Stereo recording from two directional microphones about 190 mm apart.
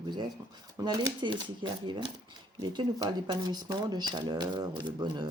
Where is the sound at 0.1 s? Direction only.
20° right (ahead or behind).